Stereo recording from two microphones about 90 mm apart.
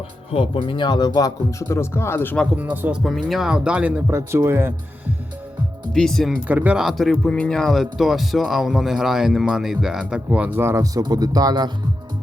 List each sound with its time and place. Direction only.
0.3 s speech: 90° left
0.7 s speech: 55° left (ahead or behind); by 2.3 s 25° left (ahead or behind)
2.6 s speech: 15° right (ahead or behind)
3.0 s speech: centre (ahead or behind)
4.3 s speech: 25° right (ahead or behind)
5.9 s speech: 5° left (ahead or behind)
6.3 s speech: 15° right (ahead or behind)
6.7 s speech: centre (ahead or behind)
10.6 s speech: 30° right (ahead or behind)
10.9 s speech: 50° right (ahead or behind)